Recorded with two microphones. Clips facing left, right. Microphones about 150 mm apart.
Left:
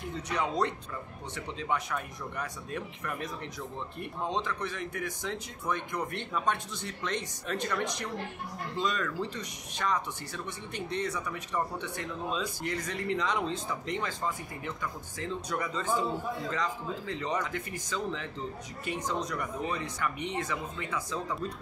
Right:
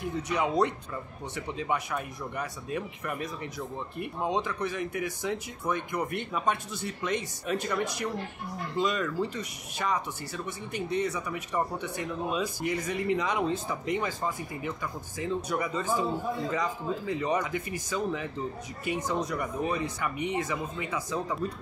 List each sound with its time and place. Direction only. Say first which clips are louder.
0.3 s speech: right 3 dB; 10° right (ahead or behind)